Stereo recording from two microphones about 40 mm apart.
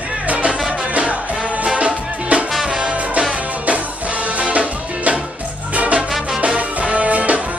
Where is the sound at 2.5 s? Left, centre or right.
Centre.